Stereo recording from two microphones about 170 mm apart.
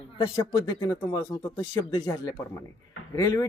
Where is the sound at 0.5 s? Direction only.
20° left (ahead or behind).